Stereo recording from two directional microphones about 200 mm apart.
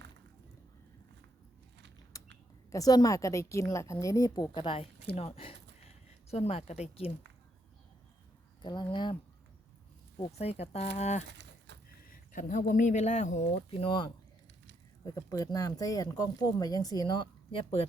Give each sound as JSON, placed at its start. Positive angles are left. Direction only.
{"t": 2.1, "sound": "a sound", "side_deg": 15}
{"t": 2.7, "sound": "speech", "side_deg": 20}
{"t": 8.6, "sound": "speech", "side_deg": 20}
{"t": 10.2, "sound": "speech", "side_deg": 30}
{"t": 11.3, "sound": "livestock", "side_deg": -60}
{"t": 12.1, "sound": "speech", "side_deg": 40}
{"t": 15.1, "sound": "speech", "side_deg": 15}